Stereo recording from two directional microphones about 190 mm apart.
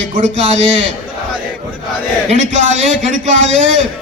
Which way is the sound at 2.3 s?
40° right (ahead or behind).